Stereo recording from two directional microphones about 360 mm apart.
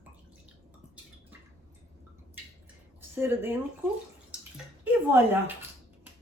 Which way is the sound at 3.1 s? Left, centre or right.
Centre.